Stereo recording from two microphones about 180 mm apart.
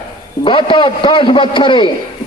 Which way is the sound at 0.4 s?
30° left (ahead or behind).